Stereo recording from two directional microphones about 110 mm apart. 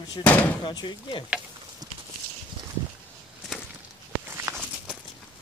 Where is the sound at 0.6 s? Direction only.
45° left (ahead or behind).